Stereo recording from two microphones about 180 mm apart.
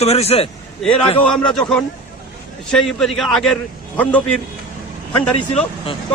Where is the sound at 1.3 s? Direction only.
5° left (ahead or behind).